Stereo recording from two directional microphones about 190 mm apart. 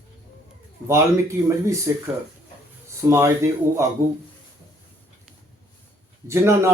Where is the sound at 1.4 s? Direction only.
15° right (ahead or behind).